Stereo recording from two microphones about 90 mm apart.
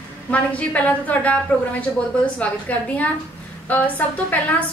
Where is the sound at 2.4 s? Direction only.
15° left (ahead or behind).